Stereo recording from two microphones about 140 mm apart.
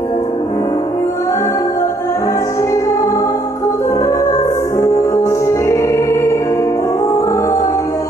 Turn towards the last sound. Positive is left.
turn(degrees=20)  # may be behind; listen again after turning